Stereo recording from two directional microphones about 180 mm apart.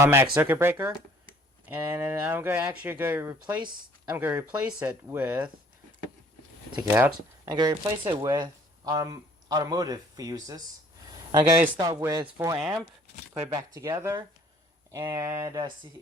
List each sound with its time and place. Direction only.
0.0 s speech: 15° right (ahead or behind)
6.7 s speech: 10° right (ahead or behind)
7.5 s speech: 25° right (ahead or behind)
12.5 s speech: 5° right (ahead or behind)
13.5 s speech: 20° right (ahead or behind)